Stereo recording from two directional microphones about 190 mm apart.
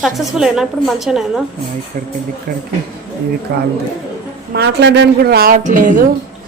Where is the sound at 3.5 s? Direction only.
55° right (ahead or behind).